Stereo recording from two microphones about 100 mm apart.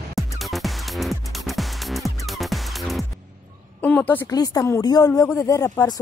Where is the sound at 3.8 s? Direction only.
15° left (ahead or behind).